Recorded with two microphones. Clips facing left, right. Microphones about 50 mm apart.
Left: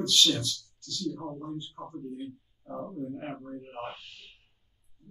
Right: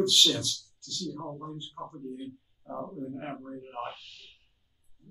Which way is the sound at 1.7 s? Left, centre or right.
Centre.